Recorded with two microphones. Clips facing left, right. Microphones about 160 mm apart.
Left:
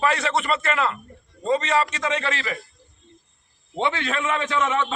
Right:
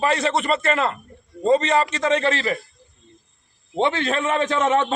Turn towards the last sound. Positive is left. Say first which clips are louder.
# right 4 dB
turn(degrees=-40)  # may be behind; listen again after turning